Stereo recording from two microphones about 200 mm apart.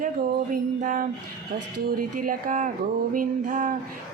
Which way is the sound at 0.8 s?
40° right (ahead or behind).